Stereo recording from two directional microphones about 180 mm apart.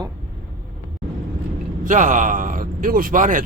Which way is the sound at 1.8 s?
45° right (ahead or behind).